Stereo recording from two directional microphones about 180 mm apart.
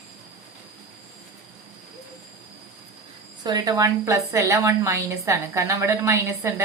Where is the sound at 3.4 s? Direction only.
20° right (ahead or behind).